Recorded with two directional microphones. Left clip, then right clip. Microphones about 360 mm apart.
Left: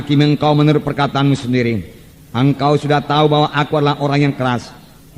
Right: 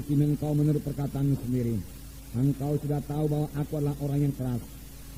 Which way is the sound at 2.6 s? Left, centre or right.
Right.